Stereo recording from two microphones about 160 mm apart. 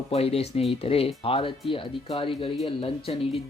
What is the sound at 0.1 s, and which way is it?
Speech, 40° left (ahead or behind).